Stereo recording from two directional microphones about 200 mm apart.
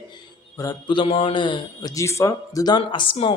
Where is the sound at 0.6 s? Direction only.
20° left (ahead or behind).